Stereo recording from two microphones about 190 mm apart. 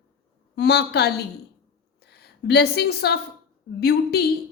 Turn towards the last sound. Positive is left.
turn(degrees=55)  # may be behind; listen again after turning